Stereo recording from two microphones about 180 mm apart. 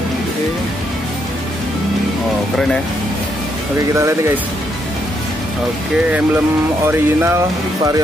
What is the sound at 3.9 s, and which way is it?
Speech, 15° right (ahead or behind).